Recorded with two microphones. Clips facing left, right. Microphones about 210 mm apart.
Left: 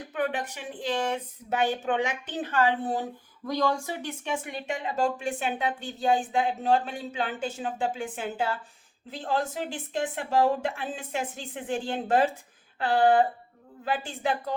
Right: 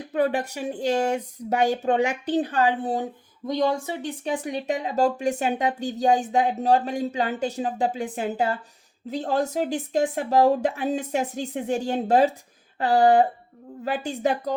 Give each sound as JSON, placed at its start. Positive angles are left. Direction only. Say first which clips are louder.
{"t": 0.1, "sound": "speech", "louder": "right 7 dB", "side_deg": -40}
{"t": 2.8, "sound": "speech", "louder": "right 3 dB", "side_deg": -25}
{"t": 4.1, "sound": "speech", "louder": "right 7 dB", "side_deg": -35}